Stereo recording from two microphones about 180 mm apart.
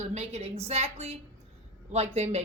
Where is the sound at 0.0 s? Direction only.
40° right (ahead or behind).